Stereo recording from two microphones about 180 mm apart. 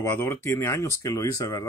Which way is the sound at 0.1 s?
10° left (ahead or behind).